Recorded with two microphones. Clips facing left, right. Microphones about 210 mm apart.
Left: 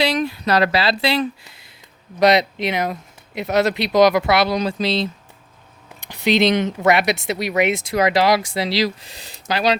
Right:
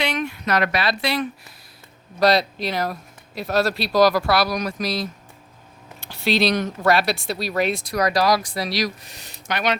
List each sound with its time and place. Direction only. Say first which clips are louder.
0.0 s speech: left 5 dB; 35° left (ahead or behind)